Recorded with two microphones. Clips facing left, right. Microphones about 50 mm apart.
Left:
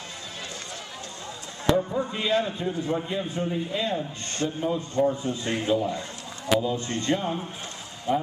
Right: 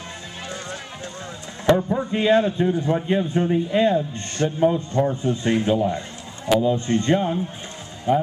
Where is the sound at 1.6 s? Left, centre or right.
Right.